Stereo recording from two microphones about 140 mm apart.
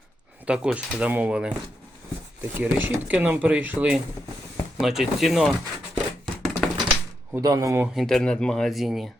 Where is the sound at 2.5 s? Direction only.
15° right (ahead or behind).